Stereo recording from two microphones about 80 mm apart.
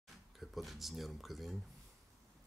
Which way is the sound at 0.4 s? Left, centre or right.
Centre.